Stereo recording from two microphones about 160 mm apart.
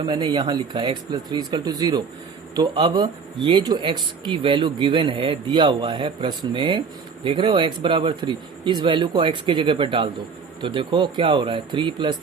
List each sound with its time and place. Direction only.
0.1 s speech: 25° right (ahead or behind)